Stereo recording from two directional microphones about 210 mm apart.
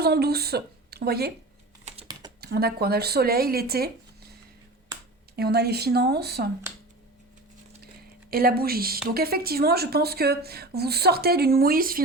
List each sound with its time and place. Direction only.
0.0 s speech: 50° right (ahead or behind)
2.4 s speech: 45° right (ahead or behind)
5.4 s speech: 50° right (ahead or behind)
8.3 s speech: 45° right (ahead or behind)